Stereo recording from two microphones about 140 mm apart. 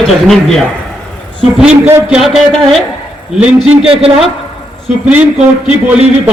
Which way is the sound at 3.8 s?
40° right (ahead or behind).